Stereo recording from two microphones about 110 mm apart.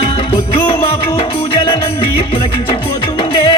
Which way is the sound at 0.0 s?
50° left (ahead or behind).